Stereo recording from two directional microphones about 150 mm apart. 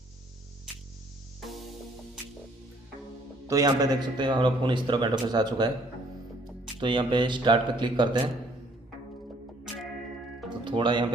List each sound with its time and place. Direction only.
3.4 s a man's voice: 25° right (ahead or behind)
6.8 s speech: 30° right (ahead or behind)
10.6 s speech: 30° right (ahead or behind)